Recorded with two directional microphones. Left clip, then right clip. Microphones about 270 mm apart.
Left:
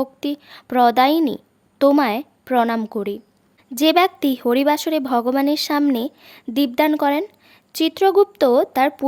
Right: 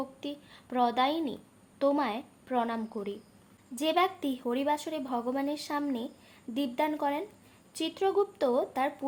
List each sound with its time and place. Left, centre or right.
0.0 s speech: left